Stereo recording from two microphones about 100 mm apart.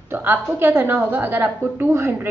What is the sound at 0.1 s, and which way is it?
A woman's voice, 20° right (ahead or behind).